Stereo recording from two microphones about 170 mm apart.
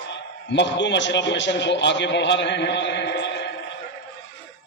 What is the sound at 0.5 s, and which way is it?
A man's voice, 90° left.